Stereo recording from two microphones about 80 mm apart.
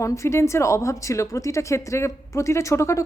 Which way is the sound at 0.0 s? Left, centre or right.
Left.